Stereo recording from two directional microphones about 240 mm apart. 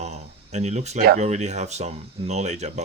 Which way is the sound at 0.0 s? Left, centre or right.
Right.